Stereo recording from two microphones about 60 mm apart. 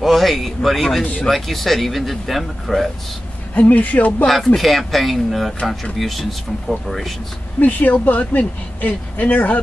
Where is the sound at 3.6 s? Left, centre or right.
Left.